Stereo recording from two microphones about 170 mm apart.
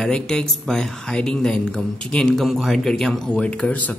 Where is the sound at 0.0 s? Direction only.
5° left (ahead or behind).